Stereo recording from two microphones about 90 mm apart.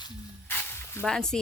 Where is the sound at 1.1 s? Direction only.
5° left (ahead or behind).